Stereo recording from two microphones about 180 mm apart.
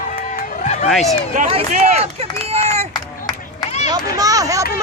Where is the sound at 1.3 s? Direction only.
40° right (ahead or behind).